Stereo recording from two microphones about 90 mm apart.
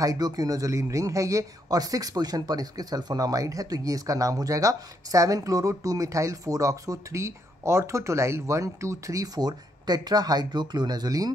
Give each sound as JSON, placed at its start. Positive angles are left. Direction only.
{"t": 0.0, "sound": "speech", "side_deg": -45}